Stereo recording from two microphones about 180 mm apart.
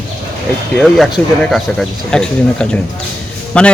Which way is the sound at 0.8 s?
Centre (ahead or behind).